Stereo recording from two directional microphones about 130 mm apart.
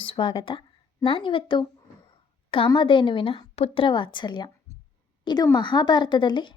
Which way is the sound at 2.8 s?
40° left (ahead or behind).